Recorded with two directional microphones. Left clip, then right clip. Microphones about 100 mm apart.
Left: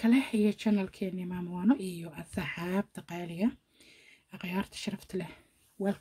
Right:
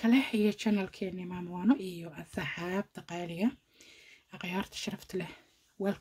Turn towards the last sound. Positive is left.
turn(degrees=0)  # may be behind; listen again after turning